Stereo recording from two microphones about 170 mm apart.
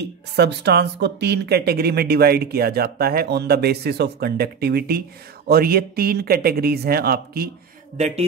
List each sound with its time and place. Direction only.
0.0 s speech: 80° right; by 7.5 s 65° right (ahead or behind)